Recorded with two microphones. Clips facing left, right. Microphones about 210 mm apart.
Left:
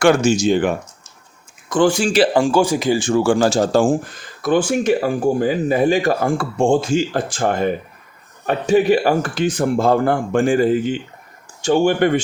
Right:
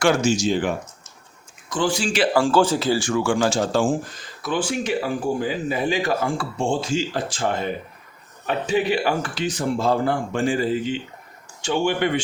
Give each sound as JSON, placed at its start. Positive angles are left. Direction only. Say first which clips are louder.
{"t": 0.0, "sound": "speech", "louder": "left 5 dB", "side_deg": 55}
{"t": 1.7, "sound": "speech", "louder": "left 7 dB", "side_deg": 50}
{"t": 2.3, "sound": "speech", "louder": "left 2 dB", "side_deg": 15}
{"t": 3.1, "sound": "speech", "louder": "left 8 dB", "side_deg": 35}